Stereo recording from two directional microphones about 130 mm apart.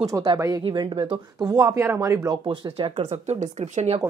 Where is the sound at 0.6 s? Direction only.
40° right (ahead or behind).